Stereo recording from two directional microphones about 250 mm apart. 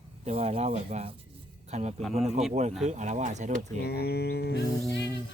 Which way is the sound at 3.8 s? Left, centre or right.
Left.